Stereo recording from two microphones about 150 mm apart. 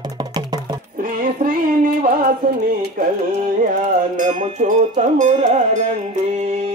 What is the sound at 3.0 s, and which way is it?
Music, 70° right (ahead or behind).